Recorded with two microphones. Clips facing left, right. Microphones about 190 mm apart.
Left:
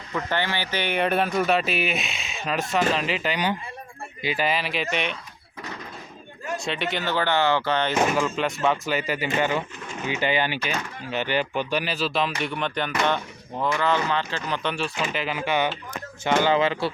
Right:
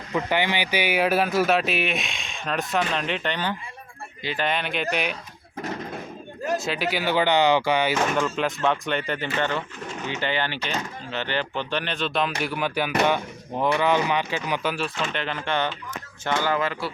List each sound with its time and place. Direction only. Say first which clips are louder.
0.1 s speech: right 3 dB; 15° right (ahead or behind)
6.6 s speech: right 2 dB; 5° right (ahead or behind)
8.1 s speech: even; centre (ahead or behind); by 16.9 s 25° left (ahead or behind)